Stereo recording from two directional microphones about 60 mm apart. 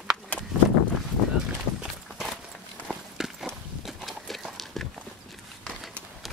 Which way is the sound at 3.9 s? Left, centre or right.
Centre.